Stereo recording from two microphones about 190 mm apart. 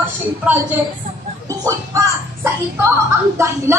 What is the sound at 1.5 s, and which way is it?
Music, 15° right (ahead or behind).